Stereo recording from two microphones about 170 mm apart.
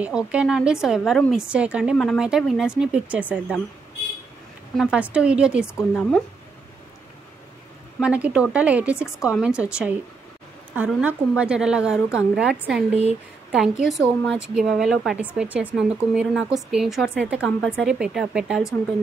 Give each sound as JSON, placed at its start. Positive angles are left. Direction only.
{"t": 0.0, "sound": "a woman's voice", "side_deg": -5}
{"t": 4.7, "sound": "speech", "side_deg": -5}
{"t": 5.8, "sound": "speech", "side_deg": 10}
{"t": 8.0, "sound": "speech", "side_deg": -10}
{"t": 9.0, "sound": "speech", "side_deg": 15}
{"t": 9.4, "sound": "a woman's voice", "side_deg": -5}
{"t": 10.7, "sound": "a woman's voice", "side_deg": -10}
{"t": 17.4, "sound": "speech", "side_deg": 10}
{"t": 17.8, "sound": "a woman's voice", "side_deg": -5}